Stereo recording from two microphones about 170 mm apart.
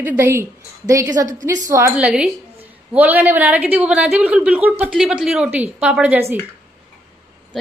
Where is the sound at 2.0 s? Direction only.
5° right (ahead or behind).